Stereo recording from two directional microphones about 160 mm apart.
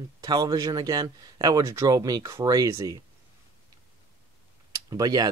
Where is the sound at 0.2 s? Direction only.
25° right (ahead or behind).